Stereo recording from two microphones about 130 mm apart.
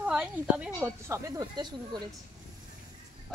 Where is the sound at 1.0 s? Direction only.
25° right (ahead or behind).